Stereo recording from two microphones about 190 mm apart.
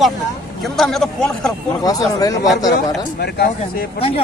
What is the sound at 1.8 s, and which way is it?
Speech, 20° left (ahead or behind).